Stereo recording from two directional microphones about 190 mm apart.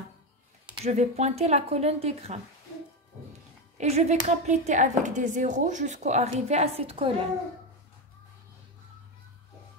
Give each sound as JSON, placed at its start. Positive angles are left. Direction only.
{"t": 0.8, "sound": "a woman's voice", "side_deg": -35}
{"t": 3.7, "sound": "a woman's voice", "side_deg": -35}